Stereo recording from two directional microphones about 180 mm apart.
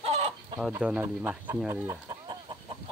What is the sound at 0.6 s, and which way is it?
Speech, 5° right (ahead or behind).